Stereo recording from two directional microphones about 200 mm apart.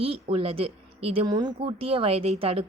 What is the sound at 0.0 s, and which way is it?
Speech, 30° right (ahead or behind).